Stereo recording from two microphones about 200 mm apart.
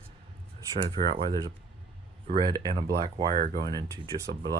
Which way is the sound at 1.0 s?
45° right (ahead or behind).